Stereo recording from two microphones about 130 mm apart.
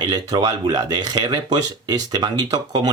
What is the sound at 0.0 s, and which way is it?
Speech, 30° right (ahead or behind).